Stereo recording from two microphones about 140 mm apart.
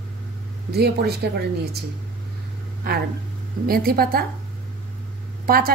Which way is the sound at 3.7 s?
90° right.